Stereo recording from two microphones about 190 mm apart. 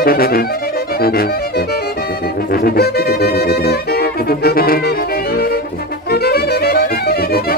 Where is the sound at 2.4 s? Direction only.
55° left (ahead or behind).